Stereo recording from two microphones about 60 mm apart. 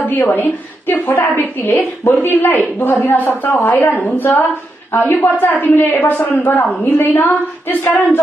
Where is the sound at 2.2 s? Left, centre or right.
Left.